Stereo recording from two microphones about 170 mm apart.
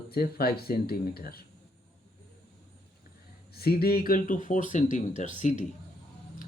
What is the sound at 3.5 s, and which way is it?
Speech, 65° left (ahead or behind).